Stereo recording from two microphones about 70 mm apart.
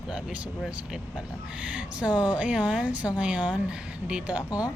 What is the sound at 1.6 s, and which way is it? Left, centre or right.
A woman's voice, centre.